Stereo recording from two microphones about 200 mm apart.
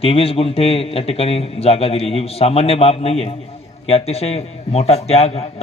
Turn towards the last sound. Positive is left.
turn(degrees=30)  # may be behind; listen again after turning